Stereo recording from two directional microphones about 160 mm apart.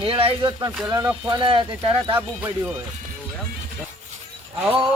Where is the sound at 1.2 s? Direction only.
30° right (ahead or behind).